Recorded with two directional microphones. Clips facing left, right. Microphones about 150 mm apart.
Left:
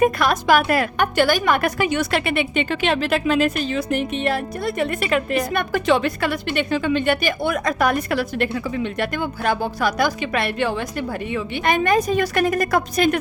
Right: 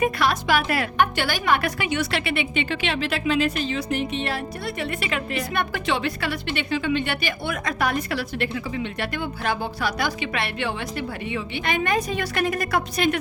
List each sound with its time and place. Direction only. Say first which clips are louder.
0.0 s a woman's voice: left 4 dB; 45° left (ahead or behind)